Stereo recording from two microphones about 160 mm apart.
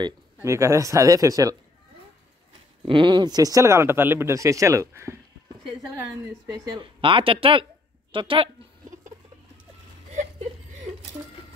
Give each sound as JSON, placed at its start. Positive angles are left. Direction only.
{"t": 0.0, "sound": "speech", "side_deg": -20}
{"t": 2.9, "sound": "speech", "side_deg": -30}